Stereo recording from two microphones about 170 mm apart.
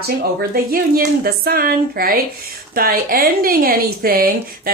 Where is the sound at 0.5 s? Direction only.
60° right (ahead or behind).